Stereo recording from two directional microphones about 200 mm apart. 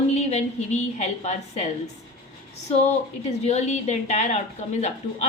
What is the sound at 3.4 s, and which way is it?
A woman's voice, 35° left (ahead or behind).